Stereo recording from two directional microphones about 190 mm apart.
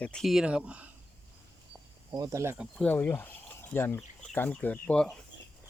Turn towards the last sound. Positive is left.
turn(degrees=5)  # may be behind; listen again after turning